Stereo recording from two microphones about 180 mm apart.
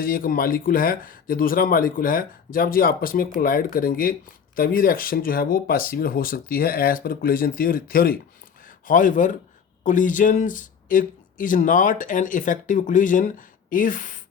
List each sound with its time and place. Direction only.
0.0 s speech: 50° left (ahead or behind)